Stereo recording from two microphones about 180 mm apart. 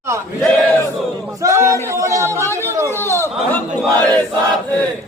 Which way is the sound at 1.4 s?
15° right (ahead or behind).